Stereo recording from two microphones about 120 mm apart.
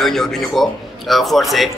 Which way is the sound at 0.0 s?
5° left (ahead or behind).